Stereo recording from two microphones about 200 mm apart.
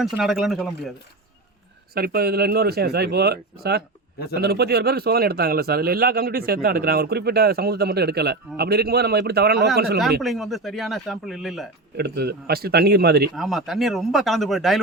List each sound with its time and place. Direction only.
0.0 s speech: centre (ahead or behind)
1.9 s speech: 50° right (ahead or behind)
10.2 s speech: centre (ahead or behind)
11.9 s speech: 50° right (ahead or behind)
13.3 s speech: centre (ahead or behind)